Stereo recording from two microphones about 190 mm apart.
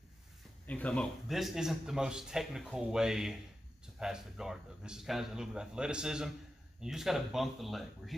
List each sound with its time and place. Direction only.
0.7 s a man's voice: 5° left (ahead or behind)